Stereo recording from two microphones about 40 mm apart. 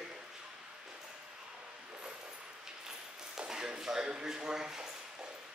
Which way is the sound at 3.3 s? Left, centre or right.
Centre.